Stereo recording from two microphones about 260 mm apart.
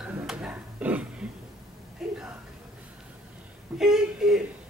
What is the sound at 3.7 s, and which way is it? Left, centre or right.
Speech, centre.